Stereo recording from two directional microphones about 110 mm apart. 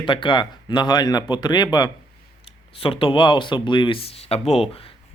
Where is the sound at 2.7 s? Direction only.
55° left (ahead or behind).